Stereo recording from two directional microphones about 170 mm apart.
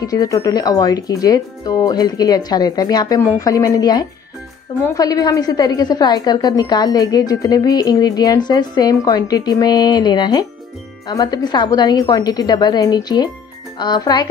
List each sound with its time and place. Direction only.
0.0 s a woman's voice: 20° left (ahead or behind)